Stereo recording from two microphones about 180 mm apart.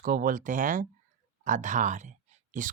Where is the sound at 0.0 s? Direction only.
50° right (ahead or behind).